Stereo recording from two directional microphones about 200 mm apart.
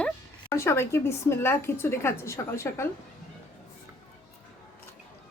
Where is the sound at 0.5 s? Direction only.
15° left (ahead or behind).